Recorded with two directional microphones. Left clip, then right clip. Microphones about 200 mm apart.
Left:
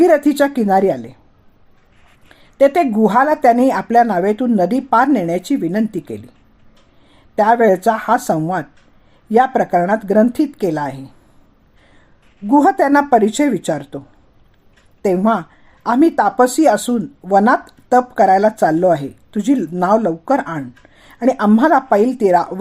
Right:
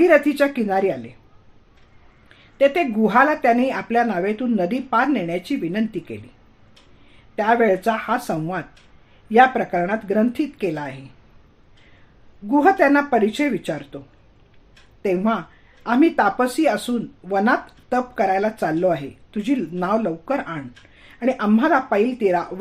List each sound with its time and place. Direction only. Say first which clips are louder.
0.0 s speech: left 3 dB; 50° left (ahead or behind)
2.6 s speech: left 5 dB; 50° left (ahead or behind)
7.3 s speech: left 6 dB; 50° left (ahead or behind)
12.5 s speech: left 3 dB; 50° left (ahead or behind)
15.0 s speech: left 6 dB; 45° left (ahead or behind)